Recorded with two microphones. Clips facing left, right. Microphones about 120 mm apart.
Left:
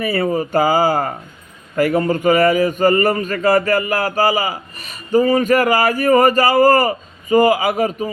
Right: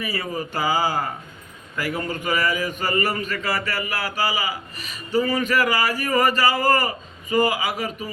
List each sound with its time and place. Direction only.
0.0 s speech: 55° left (ahead or behind)
0.3 s a man's voice: 45° left (ahead or behind)